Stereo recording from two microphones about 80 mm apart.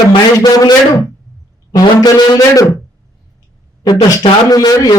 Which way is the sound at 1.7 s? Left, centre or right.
Left.